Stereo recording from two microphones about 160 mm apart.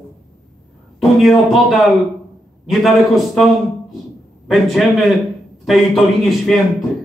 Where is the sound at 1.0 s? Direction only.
Centre (ahead or behind).